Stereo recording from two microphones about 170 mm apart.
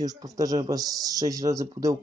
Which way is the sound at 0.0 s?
20° right (ahead or behind).